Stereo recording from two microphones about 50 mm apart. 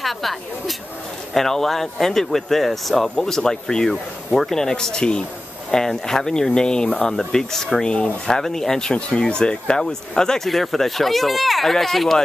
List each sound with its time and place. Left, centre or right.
0.0 s speech: centre
7.1 s speech: centre